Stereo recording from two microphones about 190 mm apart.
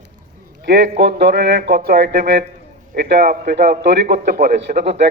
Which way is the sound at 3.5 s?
65° right (ahead or behind).